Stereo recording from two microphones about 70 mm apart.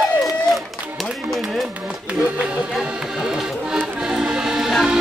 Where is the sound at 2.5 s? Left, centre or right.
Centre.